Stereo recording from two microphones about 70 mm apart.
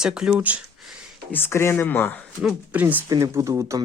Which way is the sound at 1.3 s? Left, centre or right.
Left.